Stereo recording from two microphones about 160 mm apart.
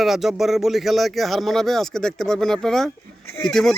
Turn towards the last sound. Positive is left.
turn(degrees=0)  # may be behind; listen again after turning